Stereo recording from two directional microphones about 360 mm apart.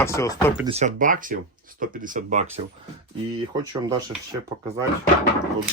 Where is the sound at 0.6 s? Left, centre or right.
Centre.